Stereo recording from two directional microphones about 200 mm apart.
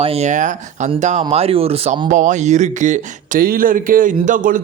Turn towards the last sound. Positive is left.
turn(degrees=-40)  # may be behind; listen again after turning